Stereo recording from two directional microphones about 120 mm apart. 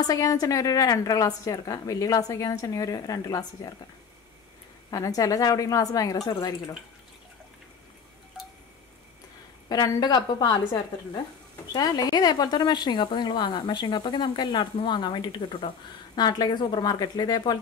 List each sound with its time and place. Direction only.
0.0 s a woman's voice: 30° left (ahead or behind)
4.9 s a woman's voice: 30° left (ahead or behind)
9.7 s speech: 30° left (ahead or behind)